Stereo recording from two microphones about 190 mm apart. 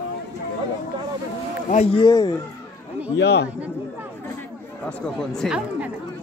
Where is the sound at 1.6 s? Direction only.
35° left (ahead or behind).